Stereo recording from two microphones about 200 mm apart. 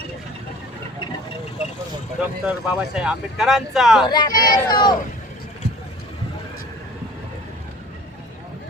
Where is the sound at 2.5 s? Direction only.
5° right (ahead or behind).